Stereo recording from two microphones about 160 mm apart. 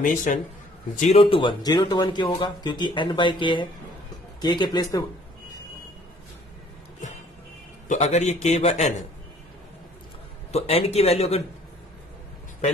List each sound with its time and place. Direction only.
0.0 s a man's voice: 55° left (ahead or behind)
0.9 s speech: 45° left (ahead or behind); by 5.0 s 25° left (ahead or behind)
7.9 s a man's voice: 45° left (ahead or behind)
10.5 s speech: 40° left (ahead or behind)